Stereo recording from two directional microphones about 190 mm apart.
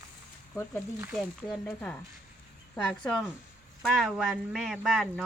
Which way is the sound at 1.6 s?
10° left (ahead or behind).